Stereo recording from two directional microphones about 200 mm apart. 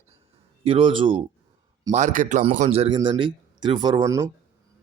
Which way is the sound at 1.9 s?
40° right (ahead or behind).